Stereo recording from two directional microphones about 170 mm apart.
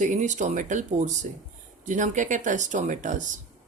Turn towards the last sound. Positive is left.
turn(degrees=-50)  # may be behind; listen again after turning